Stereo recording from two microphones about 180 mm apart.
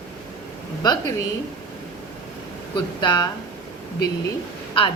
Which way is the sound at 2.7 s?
25° left (ahead or behind).